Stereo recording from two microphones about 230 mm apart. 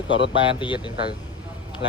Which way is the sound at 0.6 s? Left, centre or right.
Left.